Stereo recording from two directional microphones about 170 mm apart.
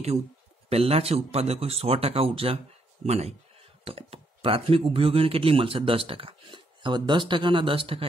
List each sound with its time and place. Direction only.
0.7 s speech: 35° right (ahead or behind)